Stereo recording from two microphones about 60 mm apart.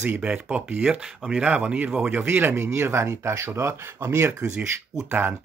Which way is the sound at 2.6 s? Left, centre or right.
Right.